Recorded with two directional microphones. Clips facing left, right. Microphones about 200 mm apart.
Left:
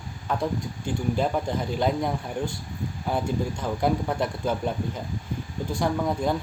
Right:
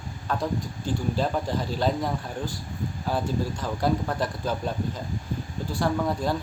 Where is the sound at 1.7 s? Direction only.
15° left (ahead or behind).